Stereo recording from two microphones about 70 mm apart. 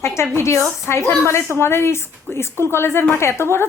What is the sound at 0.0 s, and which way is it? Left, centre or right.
Speech, left.